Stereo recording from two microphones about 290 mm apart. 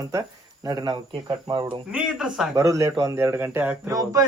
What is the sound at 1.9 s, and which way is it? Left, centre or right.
A man's voice, centre.